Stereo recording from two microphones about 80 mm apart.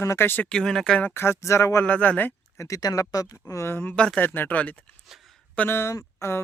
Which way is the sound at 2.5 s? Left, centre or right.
Left.